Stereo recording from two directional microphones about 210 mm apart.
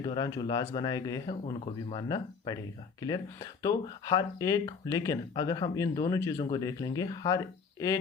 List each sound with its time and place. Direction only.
0.0 s speech: 20° left (ahead or behind)
3.6 s speech: 15° left (ahead or behind)